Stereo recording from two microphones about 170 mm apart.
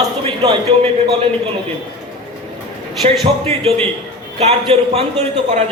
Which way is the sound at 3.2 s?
35° right (ahead or behind).